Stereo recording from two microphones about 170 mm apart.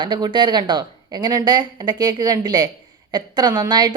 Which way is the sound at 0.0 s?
25° right (ahead or behind).